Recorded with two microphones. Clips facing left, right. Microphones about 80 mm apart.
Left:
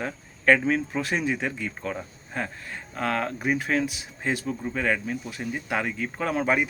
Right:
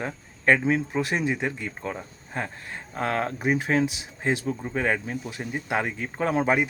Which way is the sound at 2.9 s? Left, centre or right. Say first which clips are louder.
Right 1 dB; right.